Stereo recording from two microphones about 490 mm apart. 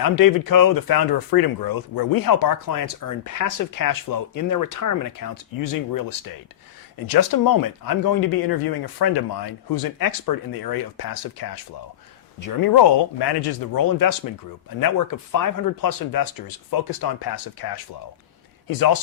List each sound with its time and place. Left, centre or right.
0.2 s speech: left